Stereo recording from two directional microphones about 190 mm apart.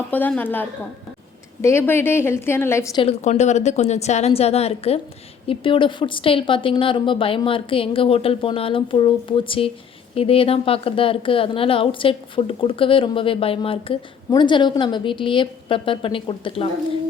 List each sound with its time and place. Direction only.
0.1 s a woman's voice: 10° left (ahead or behind)
3.0 s a woman's voice: 35° left (ahead or behind)